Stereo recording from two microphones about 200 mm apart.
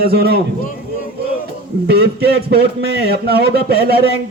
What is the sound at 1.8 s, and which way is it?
A man's voice, 55° right (ahead or behind).